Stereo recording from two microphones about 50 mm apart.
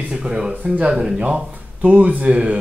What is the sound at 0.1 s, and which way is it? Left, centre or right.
Speech, centre.